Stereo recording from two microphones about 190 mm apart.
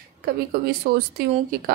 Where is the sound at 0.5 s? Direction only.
55° right (ahead or behind).